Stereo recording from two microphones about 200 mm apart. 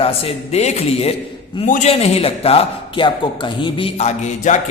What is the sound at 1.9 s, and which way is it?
A man's voice, 30° left (ahead or behind).